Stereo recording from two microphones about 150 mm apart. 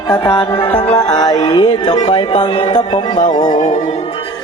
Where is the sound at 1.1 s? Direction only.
25° left (ahead or behind).